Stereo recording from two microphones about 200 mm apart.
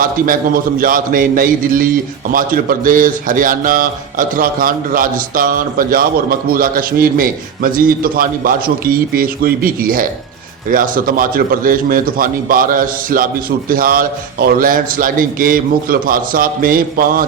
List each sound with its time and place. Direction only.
0.0 s a man's voice: 45° right (ahead or behind)